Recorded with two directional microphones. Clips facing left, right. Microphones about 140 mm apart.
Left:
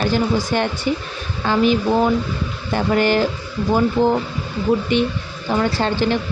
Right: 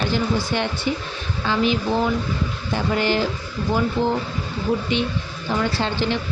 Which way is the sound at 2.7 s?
50° left (ahead or behind).